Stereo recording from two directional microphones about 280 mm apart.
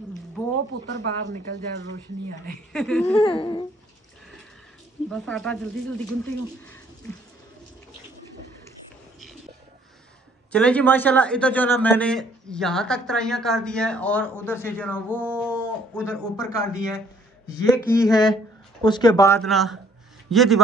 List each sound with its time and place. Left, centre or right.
1.3 s speech: right
2.7 s a man's voice: centre
3.2 s speech: centre
5.1 s a man's voice: centre
10.5 s a man's voice: centre
15.0 s music: centre
16.3 s a man's voice: centre